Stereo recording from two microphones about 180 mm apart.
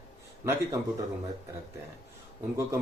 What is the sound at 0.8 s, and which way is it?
Speech, 15° right (ahead or behind).